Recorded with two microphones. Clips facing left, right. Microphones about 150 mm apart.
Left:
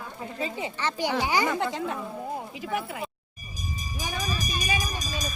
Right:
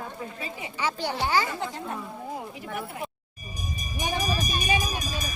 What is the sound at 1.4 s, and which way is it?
Speech, 80° left.